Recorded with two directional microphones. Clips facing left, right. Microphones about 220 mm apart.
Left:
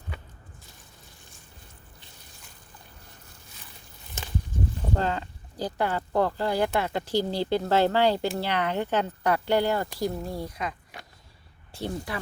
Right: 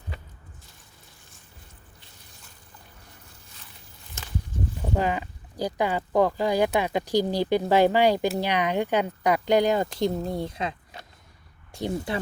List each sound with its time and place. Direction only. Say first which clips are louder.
4.9 s speech: right 3 dB; 15° right (ahead or behind)